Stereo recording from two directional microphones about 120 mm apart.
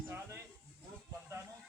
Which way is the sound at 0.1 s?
20° right (ahead or behind).